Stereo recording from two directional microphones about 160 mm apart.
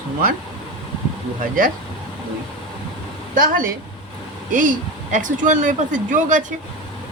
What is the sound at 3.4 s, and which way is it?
Speech, 60° right (ahead or behind).